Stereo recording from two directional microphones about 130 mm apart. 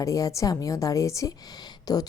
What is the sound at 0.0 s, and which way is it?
A woman's voice, 25° left (ahead or behind).